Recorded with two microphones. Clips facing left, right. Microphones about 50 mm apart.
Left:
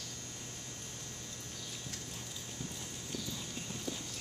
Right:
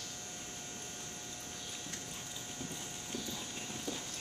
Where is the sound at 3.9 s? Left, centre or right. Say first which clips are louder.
Even; centre.